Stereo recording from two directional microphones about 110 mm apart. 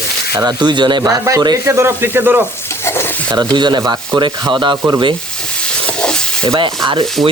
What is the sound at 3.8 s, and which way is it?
Sanding, 40° right (ahead or behind).